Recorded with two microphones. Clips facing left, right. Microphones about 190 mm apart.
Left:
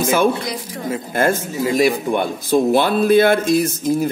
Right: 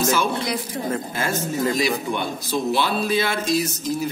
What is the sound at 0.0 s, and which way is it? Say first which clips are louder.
A man's voice: left 5 dB; 55° left (ahead or behind).